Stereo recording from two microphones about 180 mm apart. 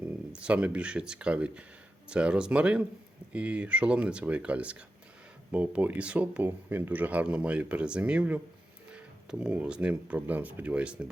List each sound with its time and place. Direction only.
0.3 s speech: 5° right (ahead or behind)